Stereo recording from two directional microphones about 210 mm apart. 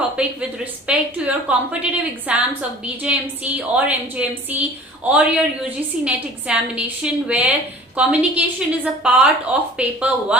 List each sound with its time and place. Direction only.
0.9 s a woman's voice: 5° right (ahead or behind)